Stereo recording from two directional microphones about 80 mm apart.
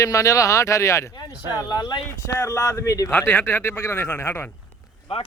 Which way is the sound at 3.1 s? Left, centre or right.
Left.